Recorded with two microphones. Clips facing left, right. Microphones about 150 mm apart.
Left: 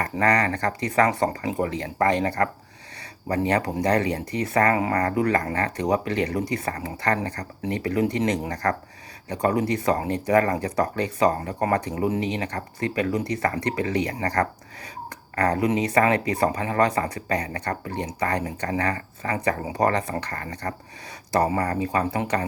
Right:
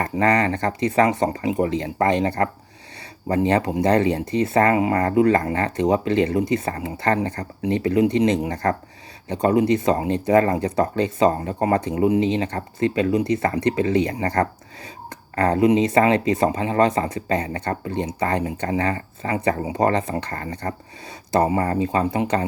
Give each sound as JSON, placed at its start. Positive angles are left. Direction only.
{"t": 0.0, "sound": "speech", "side_deg": -25}